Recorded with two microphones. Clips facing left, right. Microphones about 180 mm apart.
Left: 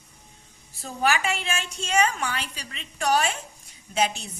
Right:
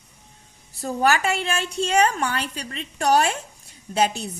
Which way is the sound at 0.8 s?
45° right (ahead or behind).